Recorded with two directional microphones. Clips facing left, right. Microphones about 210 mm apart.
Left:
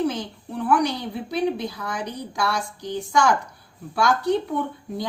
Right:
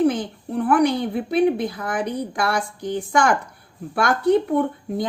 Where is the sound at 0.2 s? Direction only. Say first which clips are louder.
Right 5 dB; 55° right (ahead or behind).